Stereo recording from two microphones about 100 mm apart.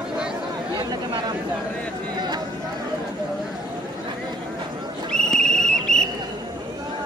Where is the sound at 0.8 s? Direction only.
45° right (ahead or behind).